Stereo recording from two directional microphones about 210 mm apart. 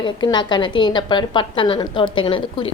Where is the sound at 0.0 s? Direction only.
20° left (ahead or behind).